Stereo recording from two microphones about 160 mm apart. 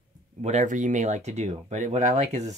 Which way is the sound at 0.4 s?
45° right (ahead or behind).